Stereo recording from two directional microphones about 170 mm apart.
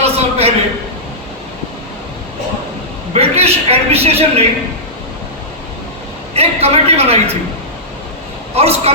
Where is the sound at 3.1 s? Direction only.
35° right (ahead or behind).